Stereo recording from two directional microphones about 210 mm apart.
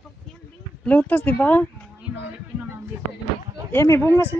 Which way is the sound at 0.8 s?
5° left (ahead or behind).